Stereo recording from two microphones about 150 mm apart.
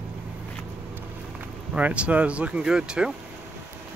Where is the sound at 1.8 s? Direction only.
10° right (ahead or behind).